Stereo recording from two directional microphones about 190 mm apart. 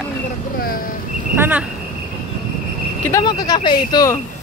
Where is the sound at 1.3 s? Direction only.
10° right (ahead or behind).